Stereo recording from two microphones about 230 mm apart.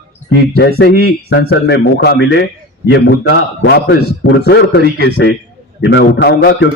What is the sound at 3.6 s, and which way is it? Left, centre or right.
A man's voice, left.